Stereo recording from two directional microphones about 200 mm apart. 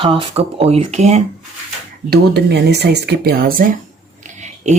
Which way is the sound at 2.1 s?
55° right (ahead or behind).